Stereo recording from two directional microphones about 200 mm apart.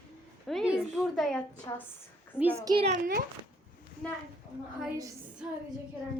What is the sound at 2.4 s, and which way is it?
Speech, 10° right (ahead or behind).